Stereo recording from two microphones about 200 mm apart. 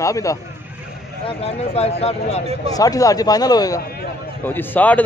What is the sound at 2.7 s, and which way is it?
Speech, 15° left (ahead or behind).